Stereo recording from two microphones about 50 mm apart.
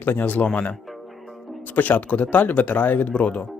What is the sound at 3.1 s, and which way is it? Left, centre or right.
Speech, left.